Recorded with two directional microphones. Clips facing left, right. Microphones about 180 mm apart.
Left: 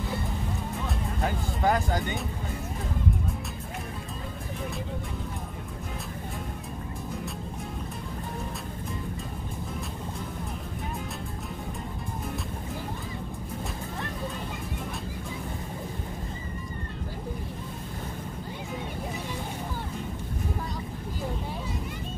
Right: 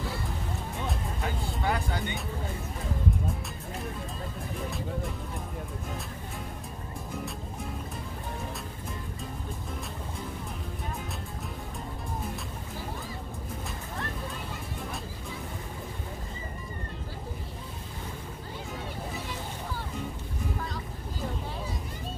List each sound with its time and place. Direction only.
1.2 s speech: 40° left (ahead or behind)